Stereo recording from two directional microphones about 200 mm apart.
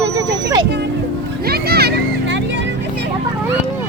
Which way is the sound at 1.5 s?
50° right (ahead or behind).